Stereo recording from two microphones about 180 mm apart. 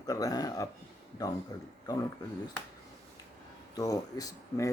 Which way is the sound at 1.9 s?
20° left (ahead or behind).